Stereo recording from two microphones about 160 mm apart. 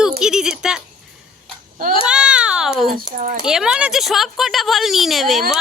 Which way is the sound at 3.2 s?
60° right (ahead or behind).